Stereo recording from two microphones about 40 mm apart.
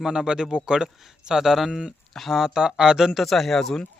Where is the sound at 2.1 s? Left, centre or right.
Centre.